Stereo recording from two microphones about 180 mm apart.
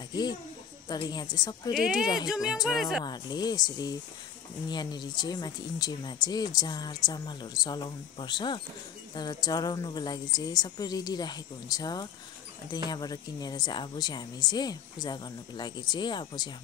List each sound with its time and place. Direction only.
0.1 s speech: 20° left (ahead or behind)
1.7 s music: centre (ahead or behind)
3.0 s speech: 25° left (ahead or behind)